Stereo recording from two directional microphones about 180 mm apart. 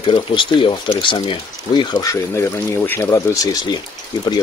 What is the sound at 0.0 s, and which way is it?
Speech, 30° left (ahead or behind).